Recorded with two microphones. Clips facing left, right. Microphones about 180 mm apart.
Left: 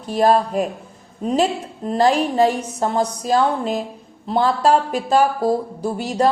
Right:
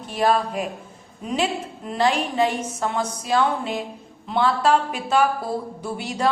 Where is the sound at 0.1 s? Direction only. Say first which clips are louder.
Left 5 dB; 40° left (ahead or behind).